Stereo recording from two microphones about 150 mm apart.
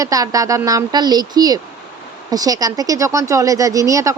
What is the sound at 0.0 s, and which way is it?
Speech, 25° right (ahead or behind).